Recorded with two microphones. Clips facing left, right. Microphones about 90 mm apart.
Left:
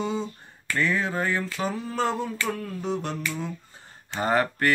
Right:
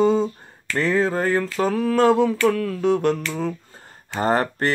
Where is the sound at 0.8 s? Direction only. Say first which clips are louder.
Right 5 dB; 35° right (ahead or behind).